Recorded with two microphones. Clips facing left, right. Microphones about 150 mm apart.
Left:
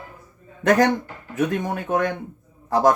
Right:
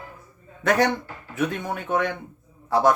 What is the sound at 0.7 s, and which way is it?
Speech, 40° left (ahead or behind).